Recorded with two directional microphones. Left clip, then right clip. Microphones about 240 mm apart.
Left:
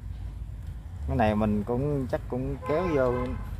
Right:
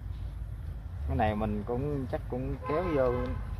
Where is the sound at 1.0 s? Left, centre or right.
Left.